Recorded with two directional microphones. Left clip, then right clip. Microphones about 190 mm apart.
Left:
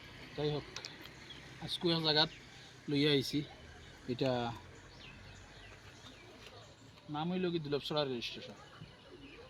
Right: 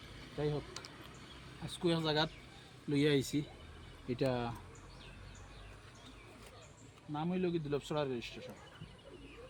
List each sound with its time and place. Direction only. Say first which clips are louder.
0.3 s speech: left 1 dB; centre (ahead or behind)
1.6 s speech: left 2 dB; centre (ahead or behind)
4.1 s speech: left 1 dB; 20° left (ahead or behind)
7.1 s speech: even; centre (ahead or behind)